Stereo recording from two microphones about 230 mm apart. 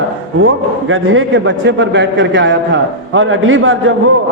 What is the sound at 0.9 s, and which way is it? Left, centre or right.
A man's voice, right.